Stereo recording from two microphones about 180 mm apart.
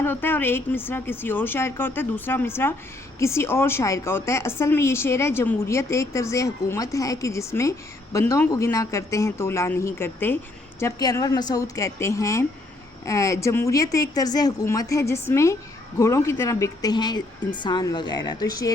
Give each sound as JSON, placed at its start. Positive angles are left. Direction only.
{"t": 0.0, "sound": "a woman's voice", "side_deg": 10}